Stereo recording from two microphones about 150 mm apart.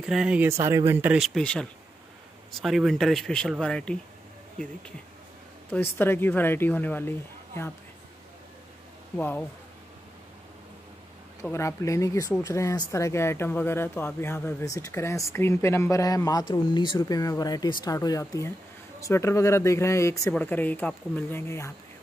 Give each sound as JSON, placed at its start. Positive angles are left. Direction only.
{"t": 0.0, "sound": "speech", "side_deg": -5}
{"t": 0.5, "sound": "speech", "side_deg": -20}
{"t": 1.1, "sound": "speech", "side_deg": 0}
{"t": 5.7, "sound": "speech", "side_deg": 15}
{"t": 9.1, "sound": "speech", "side_deg": 10}
{"t": 11.4, "sound": "speech", "side_deg": 20}